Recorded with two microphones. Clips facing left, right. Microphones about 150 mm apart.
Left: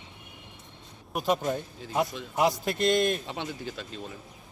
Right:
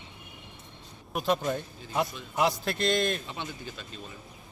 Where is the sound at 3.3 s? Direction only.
85° left.